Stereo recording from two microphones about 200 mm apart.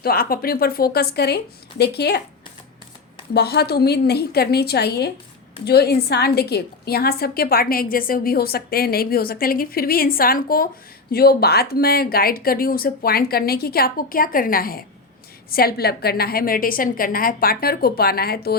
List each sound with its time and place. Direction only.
0.0 s a woman's voice: 50° left (ahead or behind)
3.3 s a woman's voice: 55° left (ahead or behind)